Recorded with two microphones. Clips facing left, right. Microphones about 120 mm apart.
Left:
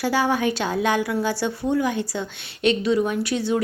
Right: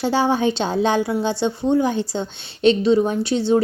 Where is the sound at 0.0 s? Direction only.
25° right (ahead or behind).